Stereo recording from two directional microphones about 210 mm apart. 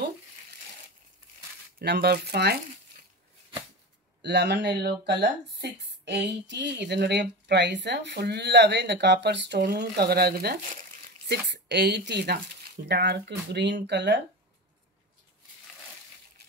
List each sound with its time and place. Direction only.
1.8 s speech: 50° right (ahead or behind)
4.2 s speech: 55° right (ahead or behind)